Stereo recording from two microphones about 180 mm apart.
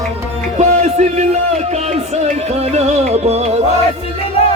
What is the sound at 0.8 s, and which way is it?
Speech, 40° right (ahead or behind).